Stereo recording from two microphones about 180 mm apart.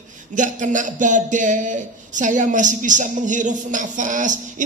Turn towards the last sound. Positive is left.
turn(degrees=-45)  # may be behind; listen again after turning